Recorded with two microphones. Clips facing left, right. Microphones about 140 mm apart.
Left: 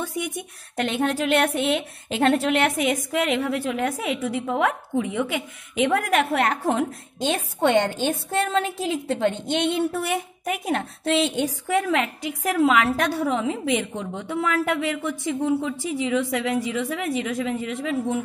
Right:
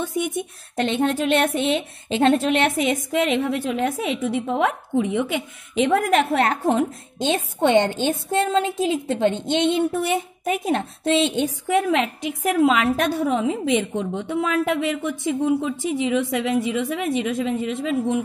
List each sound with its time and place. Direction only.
0.0 s a woman's voice: 20° right (ahead or behind)